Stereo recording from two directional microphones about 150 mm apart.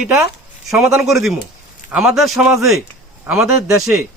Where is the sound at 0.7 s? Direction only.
5° right (ahead or behind).